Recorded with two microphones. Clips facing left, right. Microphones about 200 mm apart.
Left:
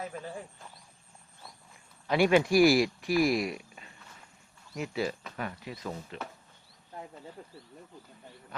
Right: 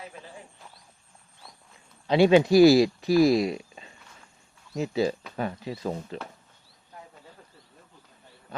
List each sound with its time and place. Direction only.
2.0 s speech: 25° right (ahead or behind)